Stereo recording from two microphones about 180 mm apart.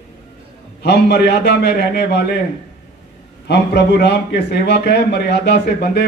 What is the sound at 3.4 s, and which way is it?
A man's voice, 65° left (ahead or behind).